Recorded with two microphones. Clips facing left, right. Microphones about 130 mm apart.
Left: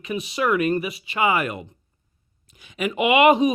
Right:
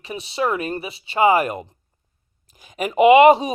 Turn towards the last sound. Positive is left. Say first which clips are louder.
# right 5 dB
turn(degrees=-30)  # may be behind; listen again after turning